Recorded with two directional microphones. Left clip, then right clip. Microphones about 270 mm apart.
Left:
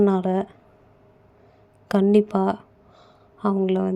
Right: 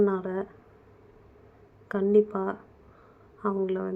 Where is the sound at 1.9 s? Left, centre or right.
Left.